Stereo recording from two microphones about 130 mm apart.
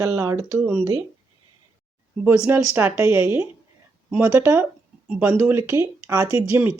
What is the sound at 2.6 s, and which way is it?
Speech, 20° right (ahead or behind).